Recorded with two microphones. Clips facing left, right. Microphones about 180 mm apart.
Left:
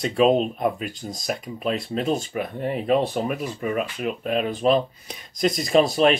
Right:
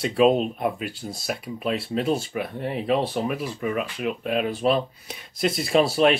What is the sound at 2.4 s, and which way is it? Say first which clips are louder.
Speech: left 2 dB; 45° left (ahead or behind).